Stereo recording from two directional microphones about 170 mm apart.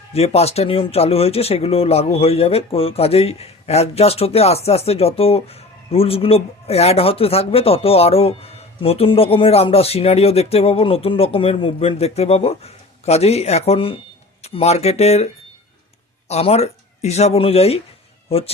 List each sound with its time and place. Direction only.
0.1 s speech: 35° left (ahead or behind)
16.3 s speech: 40° left (ahead or behind)